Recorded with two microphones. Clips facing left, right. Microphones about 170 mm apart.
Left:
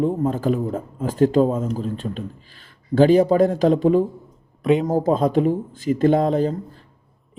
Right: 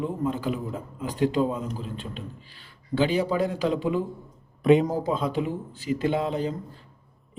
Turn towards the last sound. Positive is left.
turn(degrees=45)  # may be behind; listen again after turning